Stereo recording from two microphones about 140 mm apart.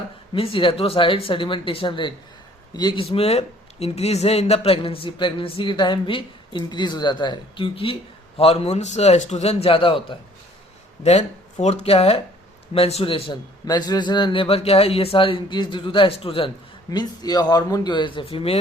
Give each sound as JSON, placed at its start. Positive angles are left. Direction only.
{"t": 0.3, "sound": "a man's voice", "side_deg": 40}
{"t": 3.0, "sound": "a man's voice", "side_deg": 45}
{"t": 11.0, "sound": "a man's voice", "side_deg": 50}
{"t": 16.9, "sound": "speech", "side_deg": 30}